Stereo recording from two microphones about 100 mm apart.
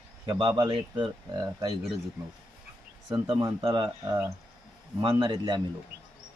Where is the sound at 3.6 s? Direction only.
45° right (ahead or behind).